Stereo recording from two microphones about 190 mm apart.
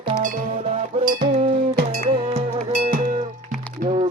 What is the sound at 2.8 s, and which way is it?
Music, 45° right (ahead or behind).